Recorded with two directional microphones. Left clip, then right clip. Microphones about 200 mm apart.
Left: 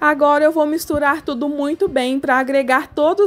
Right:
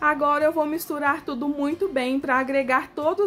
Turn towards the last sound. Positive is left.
turn(degrees=35)  # may be behind; listen again after turning